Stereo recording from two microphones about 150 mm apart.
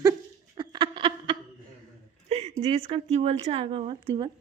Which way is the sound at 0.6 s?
35° right (ahead or behind).